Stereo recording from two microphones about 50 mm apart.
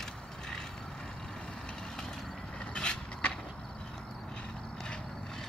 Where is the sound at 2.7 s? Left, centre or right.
Centre.